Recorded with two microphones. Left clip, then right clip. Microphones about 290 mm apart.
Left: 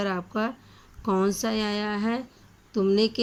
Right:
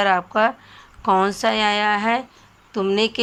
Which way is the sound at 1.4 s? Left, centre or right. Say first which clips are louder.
Right 10 dB; centre.